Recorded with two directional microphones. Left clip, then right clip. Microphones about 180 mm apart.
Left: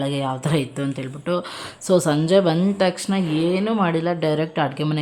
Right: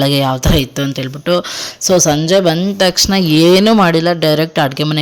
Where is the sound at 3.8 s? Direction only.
30° right (ahead or behind).